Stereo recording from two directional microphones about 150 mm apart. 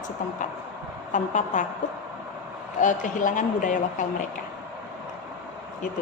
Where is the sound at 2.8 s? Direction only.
60° left (ahead or behind).